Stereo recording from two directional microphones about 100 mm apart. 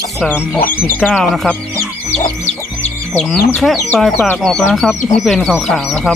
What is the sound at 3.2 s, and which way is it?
Speech, 10° left (ahead or behind).